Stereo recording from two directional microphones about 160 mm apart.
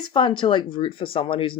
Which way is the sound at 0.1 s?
30° left (ahead or behind).